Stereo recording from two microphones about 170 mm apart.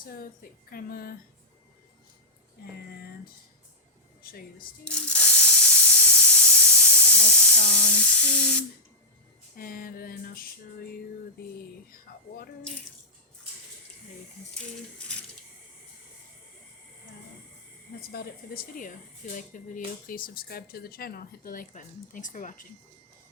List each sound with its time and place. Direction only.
0.7 s speech: 60° left (ahead or behind)
4.2 s speech: 60° left (ahead or behind)
4.9 s steam: 5° left (ahead or behind)
7.8 s spray: 10° left (ahead or behind)
9.6 s speech: 60° left (ahead or behind)
14.9 s speech: 5° left (ahead or behind)
18.1 s speech: 60° left (ahead or behind)